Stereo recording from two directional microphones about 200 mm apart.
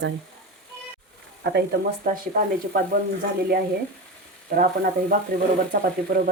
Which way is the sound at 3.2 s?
50° right (ahead or behind).